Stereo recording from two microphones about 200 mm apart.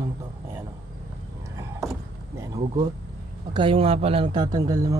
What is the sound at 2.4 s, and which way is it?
A man's voice, 20° right (ahead or behind).